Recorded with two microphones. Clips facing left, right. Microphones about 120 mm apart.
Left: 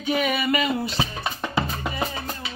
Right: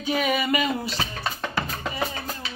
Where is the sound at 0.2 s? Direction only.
45° right (ahead or behind).